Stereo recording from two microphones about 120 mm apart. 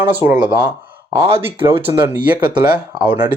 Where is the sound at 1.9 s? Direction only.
15° right (ahead or behind).